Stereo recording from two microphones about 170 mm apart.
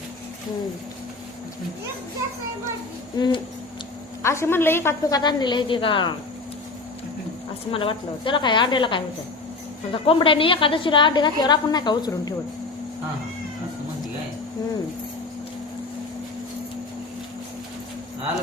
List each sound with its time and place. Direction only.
3.2 s a woman's voice: 25° left (ahead or behind)
5.2 s a woman's voice: 25° left (ahead or behind)
7.7 s a woman's voice: 30° left (ahead or behind)